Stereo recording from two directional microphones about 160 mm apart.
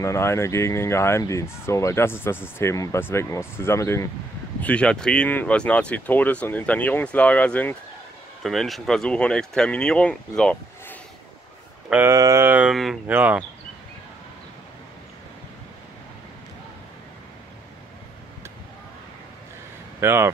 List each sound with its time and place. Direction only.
0.0 s speech: 15° left (ahead or behind)
11.9 s a sound: 15° right (ahead or behind)
20.0 s speech: 15° right (ahead or behind)